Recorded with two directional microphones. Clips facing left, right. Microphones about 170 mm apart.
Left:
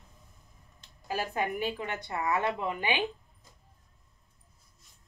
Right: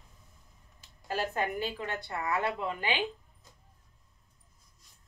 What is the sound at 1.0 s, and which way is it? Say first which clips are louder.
A woman's voice: even; 10° left (ahead or behind).